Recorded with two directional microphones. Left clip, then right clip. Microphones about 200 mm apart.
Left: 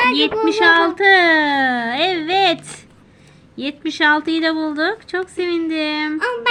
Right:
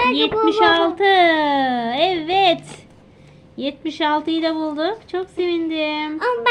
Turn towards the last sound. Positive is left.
turn(degrees=45)  # may be behind; listen again after turning